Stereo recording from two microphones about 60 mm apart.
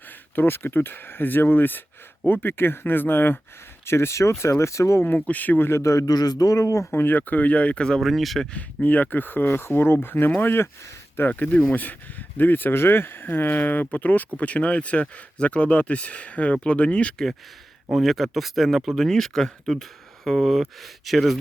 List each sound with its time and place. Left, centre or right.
0.3 s speech: left
3.8 s speech: left
5.0 s speech: left
5.6 s a man's voice: left
6.9 s speech: left; by 8.0 s centre
8.0 s speech: centre
8.5 s speech: left
17.9 s speech: centre